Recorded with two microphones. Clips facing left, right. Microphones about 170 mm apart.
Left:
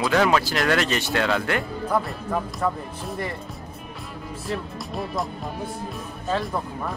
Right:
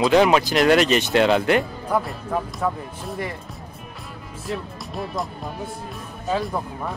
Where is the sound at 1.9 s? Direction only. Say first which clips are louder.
Right 1 dB; centre (ahead or behind).